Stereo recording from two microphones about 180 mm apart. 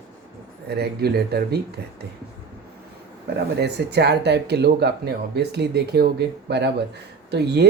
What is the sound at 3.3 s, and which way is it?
Speech, 65° right (ahead or behind).